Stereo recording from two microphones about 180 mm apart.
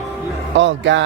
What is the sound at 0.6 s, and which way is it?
Speech, 85° right.